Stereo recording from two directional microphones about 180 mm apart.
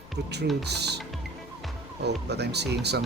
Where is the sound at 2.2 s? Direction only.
65° right (ahead or behind).